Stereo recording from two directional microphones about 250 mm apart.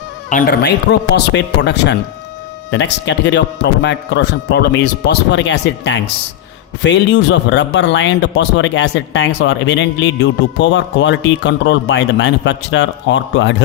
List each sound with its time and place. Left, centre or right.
0.3 s speech: left